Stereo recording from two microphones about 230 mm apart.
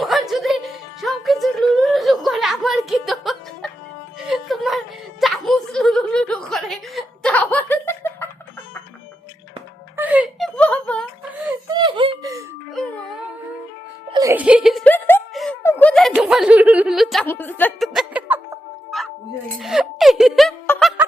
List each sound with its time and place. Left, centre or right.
0.0 s music: centre
5.2 s chuckle: centre
10.0 s music: centre
10.6 s music: centre
11.7 s whimper: right
14.1 s giggle: centre
19.5 s music: centre